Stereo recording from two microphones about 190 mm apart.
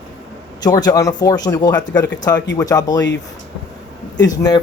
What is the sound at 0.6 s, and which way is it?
Speech, 20° left (ahead or behind).